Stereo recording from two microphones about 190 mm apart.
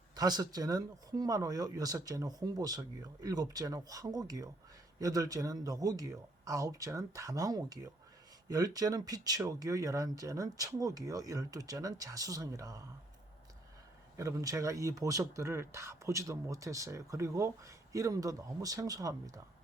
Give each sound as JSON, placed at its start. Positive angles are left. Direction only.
{"t": 0.2, "sound": "speech", "side_deg": -20}
{"t": 14.2, "sound": "speech", "side_deg": -15}